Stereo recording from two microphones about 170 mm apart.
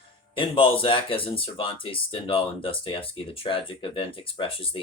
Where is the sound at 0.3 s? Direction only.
30° left (ahead or behind).